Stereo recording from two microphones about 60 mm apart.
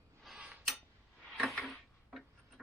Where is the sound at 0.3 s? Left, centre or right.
Centre.